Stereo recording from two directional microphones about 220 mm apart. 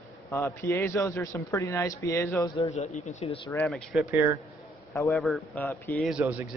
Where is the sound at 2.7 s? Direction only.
30° left (ahead or behind).